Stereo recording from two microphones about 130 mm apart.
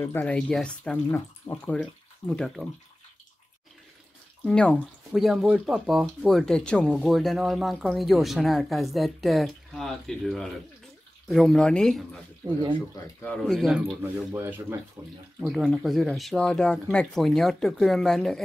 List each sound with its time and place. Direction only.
0.0 s speech: 15° left (ahead or behind)
1.1 s speech: 20° left (ahead or behind)
1.8 s speech: 5° left (ahead or behind)
4.5 s speech: 5° left (ahead or behind)
13.5 s speech: centre (ahead or behind)
14.3 s speech: 20° right (ahead or behind)
15.4 s speech: centre (ahead or behind)